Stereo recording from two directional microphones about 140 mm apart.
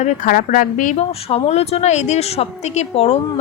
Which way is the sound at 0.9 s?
50° left (ahead or behind).